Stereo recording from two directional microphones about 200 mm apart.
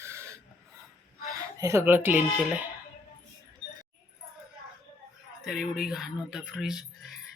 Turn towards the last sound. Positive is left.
turn(degrees=0)  # may be behind; listen again after turning